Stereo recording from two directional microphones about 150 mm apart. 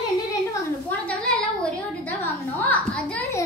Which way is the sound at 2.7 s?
10° left (ahead or behind).